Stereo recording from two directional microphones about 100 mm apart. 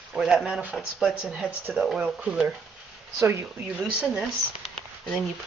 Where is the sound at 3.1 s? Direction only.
25° right (ahead or behind).